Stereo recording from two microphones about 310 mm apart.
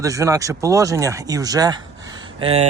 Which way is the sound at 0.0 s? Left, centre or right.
Centre.